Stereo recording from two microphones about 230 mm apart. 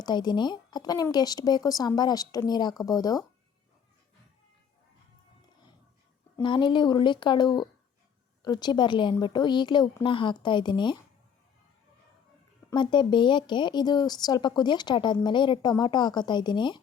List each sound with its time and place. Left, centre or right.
0.0 s speech: centre
6.3 s speech: left
12.7 s speech: centre